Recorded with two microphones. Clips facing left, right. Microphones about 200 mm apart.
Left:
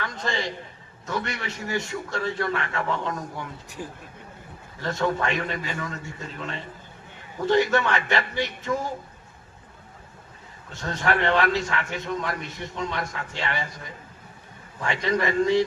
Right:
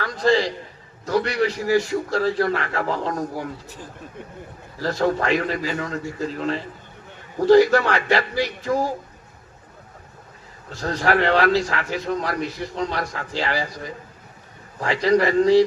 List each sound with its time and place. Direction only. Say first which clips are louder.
0.0 s a sound: right 10 dB; 40° right (ahead or behind)
1.0 s a man's voice: right 10 dB; 35° right (ahead or behind)
4.8 s a man's voice: right 4 dB; 35° right (ahead or behind)
10.7 s a man's voice: right 5 dB; 35° right (ahead or behind)
15.0 s a man's voice: right 6 dB; 35° right (ahead or behind)